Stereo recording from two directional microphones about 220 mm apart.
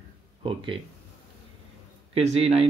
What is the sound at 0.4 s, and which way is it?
Speech, 25° right (ahead or behind).